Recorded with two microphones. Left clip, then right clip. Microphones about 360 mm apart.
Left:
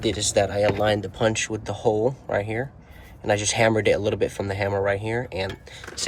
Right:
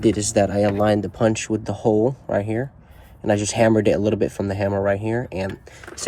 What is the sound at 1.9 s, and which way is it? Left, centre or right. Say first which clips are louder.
Speech: right 3 dB; right.